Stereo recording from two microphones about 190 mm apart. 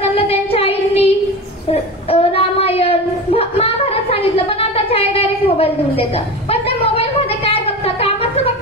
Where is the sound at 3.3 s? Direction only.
30° left (ahead or behind).